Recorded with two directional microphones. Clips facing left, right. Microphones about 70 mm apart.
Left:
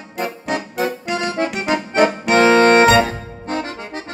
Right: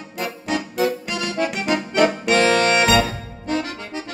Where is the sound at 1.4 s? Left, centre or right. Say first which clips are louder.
Right 1 dB; left.